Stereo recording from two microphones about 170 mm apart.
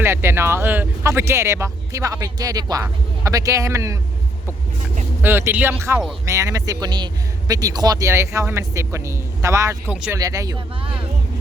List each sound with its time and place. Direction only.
0.0 s a man's voice: 15° right (ahead or behind)
5.2 s a man's voice: 10° right (ahead or behind)
9.9 s a man's voice: 5° right (ahead or behind)
10.2 s speech: 20° right (ahead or behind)